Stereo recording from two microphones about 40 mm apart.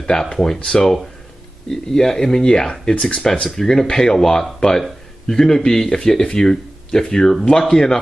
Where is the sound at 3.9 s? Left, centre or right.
Centre.